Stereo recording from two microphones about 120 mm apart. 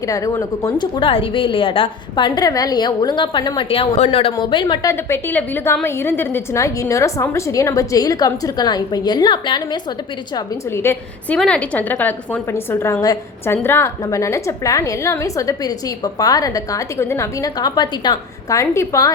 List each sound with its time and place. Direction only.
0.1 s a woman's voice: 25° left (ahead or behind)
3.7 s a woman's voice: 55° left (ahead or behind)
4.4 s a woman's voice: 40° left (ahead or behind)
4.9 s a woman's voice: 20° left (ahead or behind); by 9.6 s 40° left (ahead or behind)
10.8 s a woman's voice: 20° left (ahead or behind)
11.3 s a woman's voice: 10° left (ahead or behind); by 19.1 s 25° left (ahead or behind)